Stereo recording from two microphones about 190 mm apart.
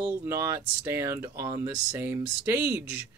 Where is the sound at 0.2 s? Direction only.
15° right (ahead or behind).